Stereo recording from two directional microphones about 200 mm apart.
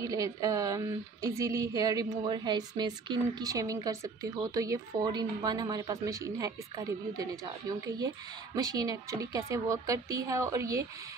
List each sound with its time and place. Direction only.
0.0 s a woman's voice: 15° right (ahead or behind)
8.5 s a woman's voice: 20° right (ahead or behind)